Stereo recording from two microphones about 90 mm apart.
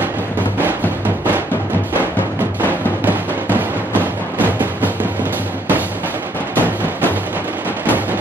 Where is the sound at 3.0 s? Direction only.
20° right (ahead or behind).